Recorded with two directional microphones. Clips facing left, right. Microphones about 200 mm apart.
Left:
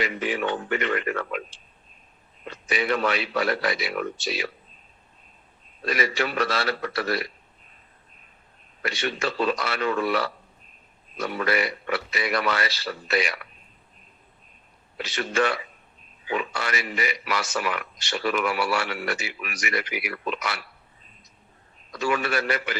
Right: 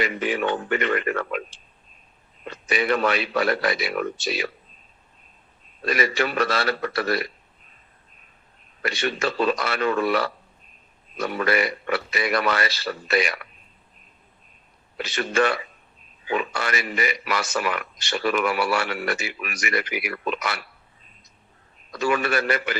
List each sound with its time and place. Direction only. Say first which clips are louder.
0.0 s speech: right 2 dB; 50° right (ahead or behind)
2.5 s speech: right 2 dB; 50° right (ahead or behind)
5.8 s speech: right 2 dB; 50° right (ahead or behind)
8.8 s speech: right 2 dB; 50° right (ahead or behind)
14.9 s speech: right 2 dB; 50° right (ahead or behind)
21.9 s speech: right 2 dB; 50° right (ahead or behind)